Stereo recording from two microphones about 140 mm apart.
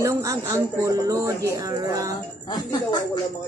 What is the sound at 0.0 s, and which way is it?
A woman's voice, 20° right (ahead or behind).